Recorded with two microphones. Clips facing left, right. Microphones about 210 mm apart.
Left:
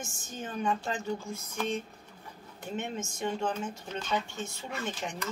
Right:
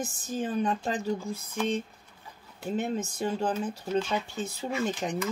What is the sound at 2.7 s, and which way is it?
Speech, 35° right (ahead or behind).